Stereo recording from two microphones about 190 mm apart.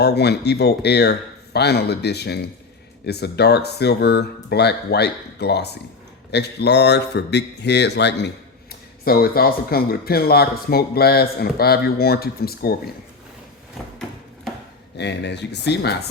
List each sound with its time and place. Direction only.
0.0 s speech: 60° left (ahead or behind)
9.0 s speech: 55° left (ahead or behind)
14.9 s speech: 65° left (ahead or behind)